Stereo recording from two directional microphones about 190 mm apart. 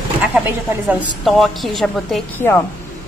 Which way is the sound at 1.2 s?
Centre (ahead or behind).